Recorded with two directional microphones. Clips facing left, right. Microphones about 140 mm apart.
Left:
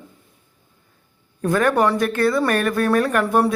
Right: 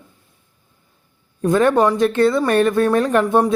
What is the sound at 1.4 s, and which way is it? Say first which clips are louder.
Speech: right 3 dB; 25° right (ahead or behind).